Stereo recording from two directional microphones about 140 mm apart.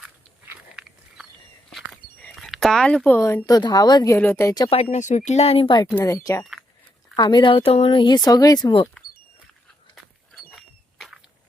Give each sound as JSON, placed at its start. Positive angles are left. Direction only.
{"t": 0.4, "sound": "biting", "side_deg": -5}
{"t": 1.7, "sound": "a sound", "side_deg": 0}
{"t": 3.2, "sound": "speech", "side_deg": 20}
{"t": 4.2, "sound": "speech", "side_deg": 15}
{"t": 4.7, "sound": "speech", "side_deg": 55}
{"t": 5.9, "sound": "speech", "side_deg": 15}
{"t": 6.4, "sound": "a sound", "side_deg": 0}
{"t": 7.2, "sound": "speech", "side_deg": 30}
{"t": 9.9, "sound": "a sound", "side_deg": 0}